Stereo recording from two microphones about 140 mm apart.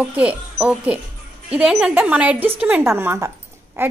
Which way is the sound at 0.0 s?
10° right (ahead or behind).